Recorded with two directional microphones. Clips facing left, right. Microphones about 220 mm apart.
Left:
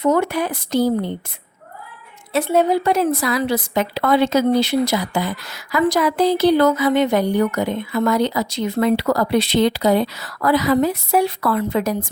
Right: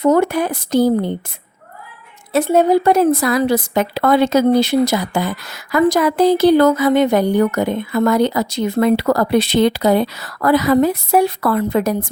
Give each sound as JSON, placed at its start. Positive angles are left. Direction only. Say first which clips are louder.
{"t": 0.0, "sound": "a woman's voice", "louder": "right 4 dB", "side_deg": -45}
{"t": 2.3, "sound": "a woman's voice", "louder": "right 4 dB", "side_deg": -45}